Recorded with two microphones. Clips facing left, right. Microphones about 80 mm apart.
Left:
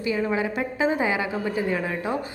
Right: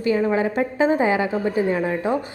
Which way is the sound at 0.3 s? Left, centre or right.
Right.